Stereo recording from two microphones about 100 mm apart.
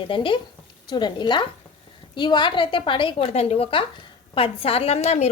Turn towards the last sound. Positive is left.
turn(degrees=90)